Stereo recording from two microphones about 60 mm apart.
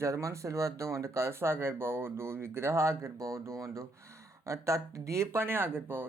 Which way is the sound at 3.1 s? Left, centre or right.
Right.